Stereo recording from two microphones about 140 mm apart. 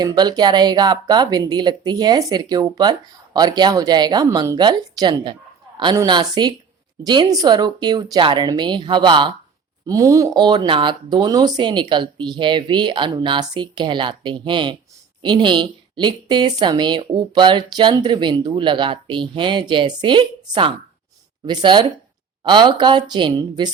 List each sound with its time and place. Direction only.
0.0 s speech: 25° right (ahead or behind)
9.8 s speech: 25° right (ahead or behind)